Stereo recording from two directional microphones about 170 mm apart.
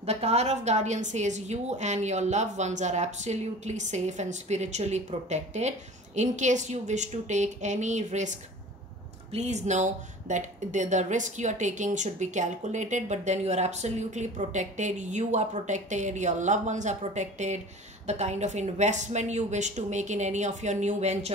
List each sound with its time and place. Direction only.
0.0 s a woman's voice: 40° right (ahead or behind)